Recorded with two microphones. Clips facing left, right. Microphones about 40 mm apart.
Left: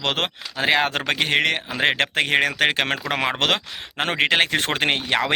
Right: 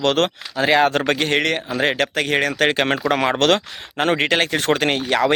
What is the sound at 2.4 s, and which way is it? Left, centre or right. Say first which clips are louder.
Speech: right 2 dB; centre.